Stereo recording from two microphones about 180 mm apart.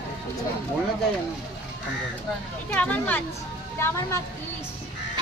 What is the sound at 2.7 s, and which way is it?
Speech, 10° left (ahead or behind).